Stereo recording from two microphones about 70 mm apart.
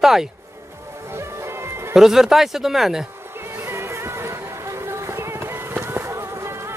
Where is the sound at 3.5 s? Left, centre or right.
Right.